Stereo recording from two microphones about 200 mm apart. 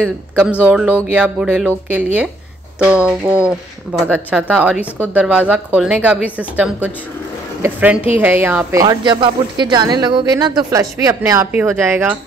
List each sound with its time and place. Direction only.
0.0 s speech: 5° right (ahead or behind)
2.8 s speech: 5° right (ahead or behind)
8.8 s speech: 25° right (ahead or behind)